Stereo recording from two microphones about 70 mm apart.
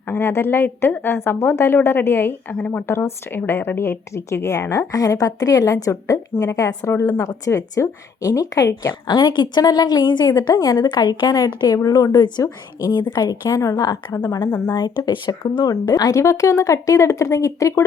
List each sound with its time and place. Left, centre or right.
0.1 s a woman's voice: left
2.6 s a woman's voice: centre
2.8 s a woman's voice: left
9.0 s a woman's voice: left
10.5 s a woman's voice: left
10.8 s a woman's voice: left
11.9 s a woman's voice: left
13.5 s a woman's voice: left
14.5 s a woman's voice: left
14.8 s a woman's voice: left
16.2 s a woman's voice: left